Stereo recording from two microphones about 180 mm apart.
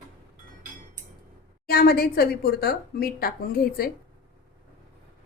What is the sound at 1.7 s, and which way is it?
A woman's voice, 60° left (ahead or behind).